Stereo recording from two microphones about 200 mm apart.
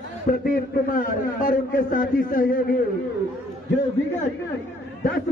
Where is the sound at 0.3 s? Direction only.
45° left (ahead or behind).